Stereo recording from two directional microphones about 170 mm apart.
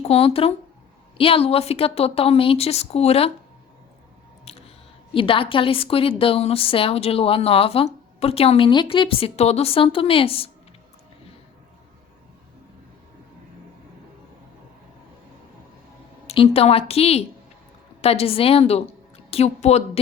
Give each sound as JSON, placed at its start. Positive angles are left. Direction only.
{"t": 0.0, "sound": "a woman's voice", "side_deg": 35}
{"t": 4.5, "sound": "a sound", "side_deg": 40}
{"t": 5.1, "sound": "a woman's voice", "side_deg": 30}
{"t": 16.2, "sound": "a woman's voice", "side_deg": 35}